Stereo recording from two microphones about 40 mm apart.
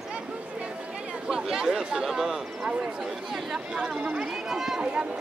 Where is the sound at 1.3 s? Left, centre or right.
Centre.